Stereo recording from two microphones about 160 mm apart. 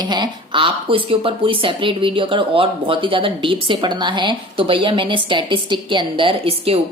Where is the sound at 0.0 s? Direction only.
25° right (ahead or behind).